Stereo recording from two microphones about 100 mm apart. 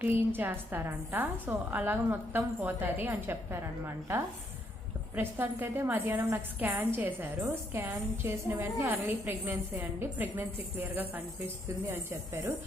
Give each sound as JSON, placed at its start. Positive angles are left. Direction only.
{"t": 0.0, "sound": "a woman's voice", "side_deg": -20}